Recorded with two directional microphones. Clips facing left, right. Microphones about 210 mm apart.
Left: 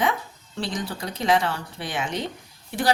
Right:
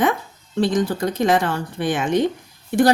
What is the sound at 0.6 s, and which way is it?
A woman's voice, 50° right (ahead or behind).